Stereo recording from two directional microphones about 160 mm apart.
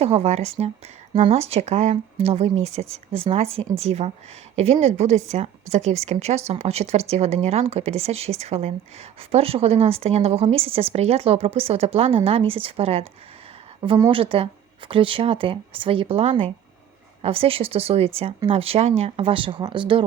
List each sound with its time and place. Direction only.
0.0 s speech: 40° right (ahead or behind)
14.1 s speech: 35° right (ahead or behind)